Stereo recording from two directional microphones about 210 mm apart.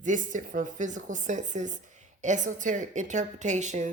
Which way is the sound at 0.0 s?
35° right (ahead or behind).